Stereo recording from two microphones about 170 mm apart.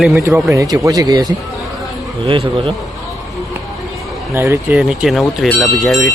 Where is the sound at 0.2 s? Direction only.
15° right (ahead or behind).